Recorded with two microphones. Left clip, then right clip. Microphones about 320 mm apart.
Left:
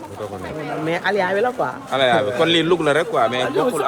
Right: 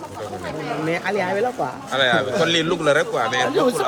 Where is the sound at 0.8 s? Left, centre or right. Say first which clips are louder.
Left 3 dB; centre.